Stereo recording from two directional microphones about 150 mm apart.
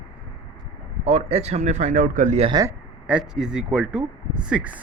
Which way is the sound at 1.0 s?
45° right (ahead or behind).